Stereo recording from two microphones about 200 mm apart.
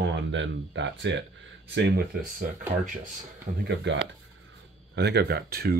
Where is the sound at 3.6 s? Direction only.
60° right (ahead or behind).